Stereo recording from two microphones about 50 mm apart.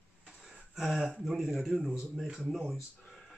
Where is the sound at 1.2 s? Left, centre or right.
Centre.